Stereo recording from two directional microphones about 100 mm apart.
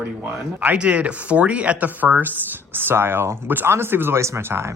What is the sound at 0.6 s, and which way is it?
Speech, 15° right (ahead or behind).